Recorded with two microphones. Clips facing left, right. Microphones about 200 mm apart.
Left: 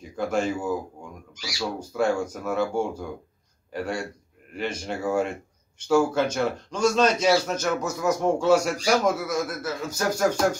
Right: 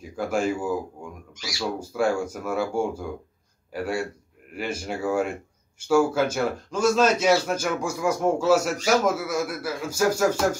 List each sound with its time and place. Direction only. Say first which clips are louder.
0.1 s a man's voice: even; 5° right (ahead or behind)
1.8 s a man's voice: even; 10° right (ahead or behind)